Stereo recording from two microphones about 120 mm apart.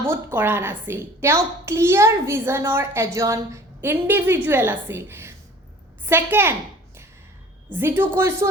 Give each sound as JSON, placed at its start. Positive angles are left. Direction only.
{"t": 0.0, "sound": "a woman's voice", "side_deg": -20}
{"t": 7.7, "sound": "a woman's voice", "side_deg": -20}